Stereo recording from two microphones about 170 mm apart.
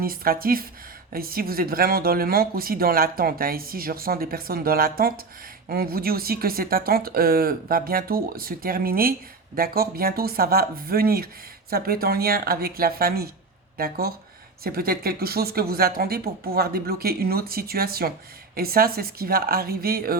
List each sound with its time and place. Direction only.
0.0 s speech: 60° right (ahead or behind)